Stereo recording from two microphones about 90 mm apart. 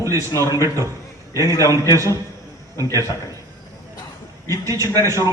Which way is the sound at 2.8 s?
40° right (ahead or behind).